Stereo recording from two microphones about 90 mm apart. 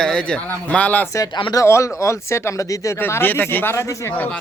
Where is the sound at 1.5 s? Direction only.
35° left (ahead or behind).